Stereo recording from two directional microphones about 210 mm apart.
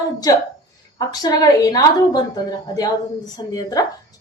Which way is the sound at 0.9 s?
20° left (ahead or behind).